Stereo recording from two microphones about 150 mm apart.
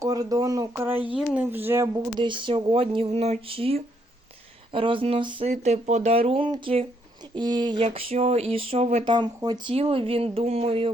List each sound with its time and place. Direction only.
0.0 s speech: 25° right (ahead or behind)
2.2 s speech: 35° right (ahead or behind)
7.9 s a sound: 40° right (ahead or behind)
9.0 s speech: 30° right (ahead or behind)
9.7 s speech: 40° right (ahead or behind)